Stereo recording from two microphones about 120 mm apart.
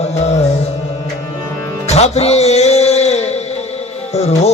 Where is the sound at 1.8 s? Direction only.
65° left (ahead or behind).